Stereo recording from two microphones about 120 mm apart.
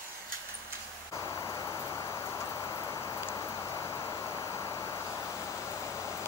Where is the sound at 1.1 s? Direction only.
25° left (ahead or behind).